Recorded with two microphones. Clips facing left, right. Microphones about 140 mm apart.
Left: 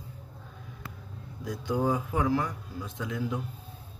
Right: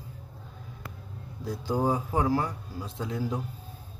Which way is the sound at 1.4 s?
30° right (ahead or behind).